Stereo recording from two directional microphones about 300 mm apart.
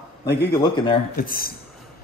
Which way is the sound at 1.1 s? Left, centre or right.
Left.